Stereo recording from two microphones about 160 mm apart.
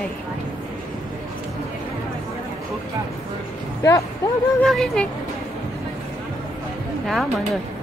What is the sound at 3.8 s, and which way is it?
Speech, 20° left (ahead or behind).